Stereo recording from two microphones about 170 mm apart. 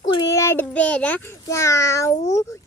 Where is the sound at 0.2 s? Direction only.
20° left (ahead or behind).